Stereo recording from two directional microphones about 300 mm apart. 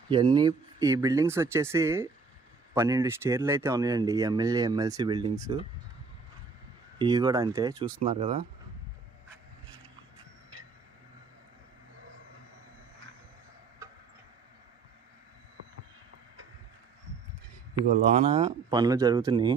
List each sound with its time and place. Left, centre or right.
0.1 s speech: centre
7.0 s speech: centre
13.8 s a sound: centre
18.3 s speech: centre